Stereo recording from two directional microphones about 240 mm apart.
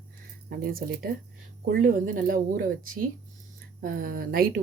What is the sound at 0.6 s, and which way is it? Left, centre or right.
Speech, right.